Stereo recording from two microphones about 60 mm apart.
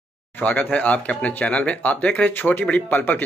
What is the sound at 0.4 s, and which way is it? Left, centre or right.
Speech, left.